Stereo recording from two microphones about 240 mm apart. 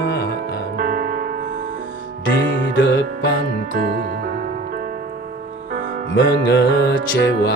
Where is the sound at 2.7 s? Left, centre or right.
Left.